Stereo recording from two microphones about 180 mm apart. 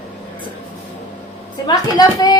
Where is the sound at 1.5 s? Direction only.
20° left (ahead or behind).